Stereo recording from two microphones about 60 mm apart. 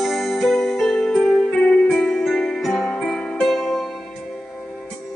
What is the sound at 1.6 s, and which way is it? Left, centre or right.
Music, left.